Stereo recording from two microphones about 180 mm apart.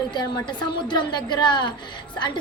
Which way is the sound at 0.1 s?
25° left (ahead or behind).